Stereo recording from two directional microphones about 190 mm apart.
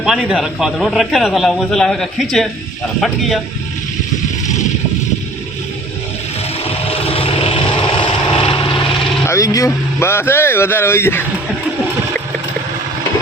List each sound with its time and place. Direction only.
0.0 s a man's voice: 5° right (ahead or behind)
7.1 s vehicle: 30° left (ahead or behind)
9.2 s speech: 15° left (ahead or behind)